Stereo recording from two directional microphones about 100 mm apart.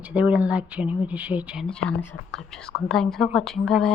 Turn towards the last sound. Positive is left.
turn(degrees=5)  # may be behind; listen again after turning